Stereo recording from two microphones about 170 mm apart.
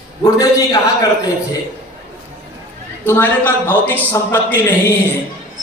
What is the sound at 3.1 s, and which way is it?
Speech, 10° left (ahead or behind).